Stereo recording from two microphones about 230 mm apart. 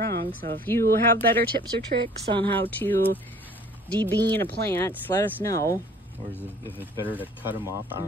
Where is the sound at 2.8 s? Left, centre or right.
Centre.